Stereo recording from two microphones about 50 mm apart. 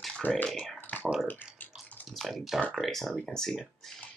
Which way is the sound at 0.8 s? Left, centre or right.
Left.